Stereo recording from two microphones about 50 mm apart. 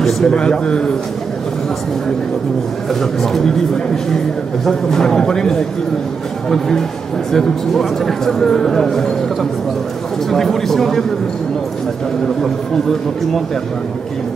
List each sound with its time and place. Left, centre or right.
0.0 s a man's voice: centre
0.4 s a man's voice: centre
2.9 s a man's voice: centre
7.3 s a man's voice: centre